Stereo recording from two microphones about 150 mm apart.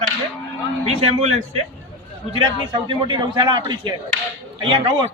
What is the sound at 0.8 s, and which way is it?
Speech, 45° right (ahead or behind).